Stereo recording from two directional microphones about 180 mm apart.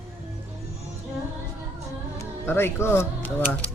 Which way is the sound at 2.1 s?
10° left (ahead or behind).